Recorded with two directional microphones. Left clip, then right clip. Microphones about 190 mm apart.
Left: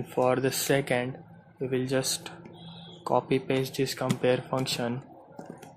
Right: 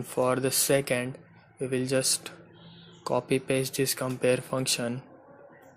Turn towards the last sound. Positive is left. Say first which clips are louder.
# even
turn(degrees=-30)  # may be behind; listen again after turning